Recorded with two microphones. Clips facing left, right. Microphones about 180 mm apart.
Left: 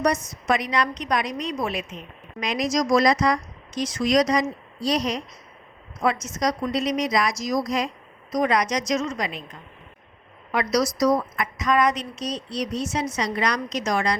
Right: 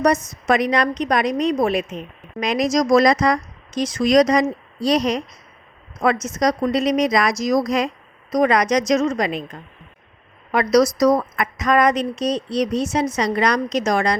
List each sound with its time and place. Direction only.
0.4 s speech: 60° right (ahead or behind)